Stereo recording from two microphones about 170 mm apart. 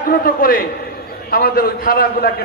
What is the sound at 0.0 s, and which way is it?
A man's voice, 55° left (ahead or behind).